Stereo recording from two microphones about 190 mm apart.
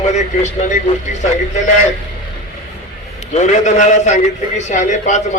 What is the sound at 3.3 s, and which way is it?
A man's voice, 40° left (ahead or behind).